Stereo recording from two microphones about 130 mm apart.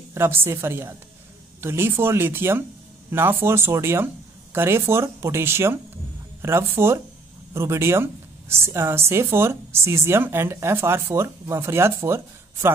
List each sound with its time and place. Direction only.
0.1 s speech: 20° right (ahead or behind)